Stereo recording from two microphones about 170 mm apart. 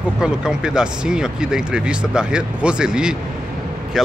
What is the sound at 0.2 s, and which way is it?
Speech, 5° right (ahead or behind).